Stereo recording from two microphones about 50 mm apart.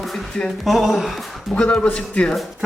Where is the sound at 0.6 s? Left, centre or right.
Centre.